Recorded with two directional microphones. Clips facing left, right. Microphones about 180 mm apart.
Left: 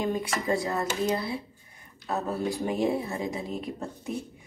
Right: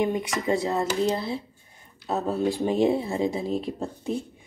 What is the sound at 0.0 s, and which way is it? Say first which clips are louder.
Speech: right 3 dB; 20° right (ahead or behind).